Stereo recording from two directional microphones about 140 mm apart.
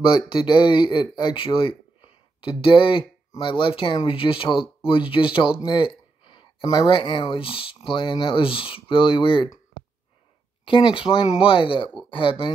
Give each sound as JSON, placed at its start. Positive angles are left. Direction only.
{"t": 0.3, "sound": "speech", "side_deg": 35}
{"t": 10.6, "sound": "speech", "side_deg": 35}